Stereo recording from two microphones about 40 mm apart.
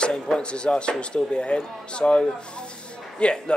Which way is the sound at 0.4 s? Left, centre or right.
Left.